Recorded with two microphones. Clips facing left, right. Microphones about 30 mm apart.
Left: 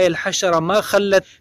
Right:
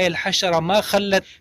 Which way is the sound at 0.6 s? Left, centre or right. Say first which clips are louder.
Left 2 dB; centre.